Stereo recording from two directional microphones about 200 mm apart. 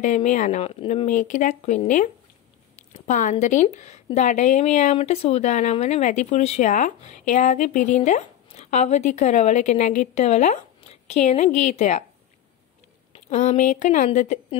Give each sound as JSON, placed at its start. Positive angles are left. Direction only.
{"t": 0.0, "sound": "speech", "side_deg": 40}
{"t": 13.1, "sound": "speech", "side_deg": 35}